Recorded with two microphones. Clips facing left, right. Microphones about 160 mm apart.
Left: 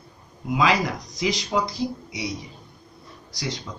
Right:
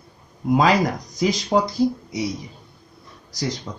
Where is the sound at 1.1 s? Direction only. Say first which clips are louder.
Right 5 dB; 50° right (ahead or behind).